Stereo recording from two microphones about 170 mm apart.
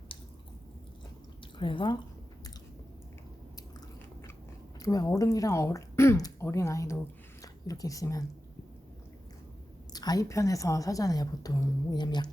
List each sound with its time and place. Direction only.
1.5 s a woman's voice: 30° left (ahead or behind)
4.8 s a woman's voice: 20° left (ahead or behind)
9.9 s a woman's voice: 25° left (ahead or behind)